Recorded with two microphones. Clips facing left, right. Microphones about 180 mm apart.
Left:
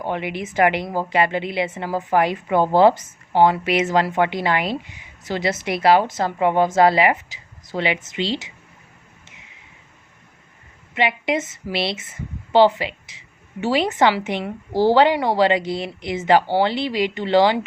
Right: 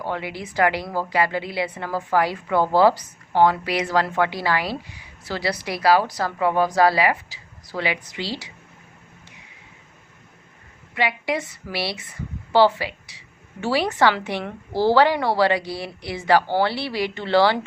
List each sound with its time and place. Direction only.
0.0 s a woman's voice: 20° left (ahead or behind)
10.9 s a woman's voice: 20° left (ahead or behind)